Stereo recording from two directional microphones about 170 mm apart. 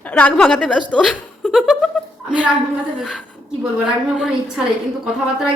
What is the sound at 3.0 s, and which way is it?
Speech, centre (ahead or behind).